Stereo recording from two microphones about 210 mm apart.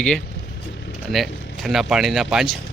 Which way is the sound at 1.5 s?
Centre (ahead or behind).